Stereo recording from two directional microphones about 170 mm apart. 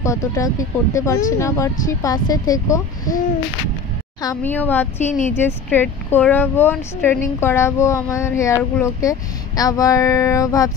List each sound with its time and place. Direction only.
0.0 s speech: 20° left (ahead or behind)
4.4 s speech: 10° left (ahead or behind)
5.0 s speech: 45° left (ahead or behind)
5.3 s speech: 10° left (ahead or behind)